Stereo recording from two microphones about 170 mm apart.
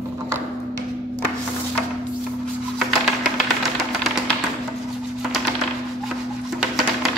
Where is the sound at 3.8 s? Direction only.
Centre (ahead or behind).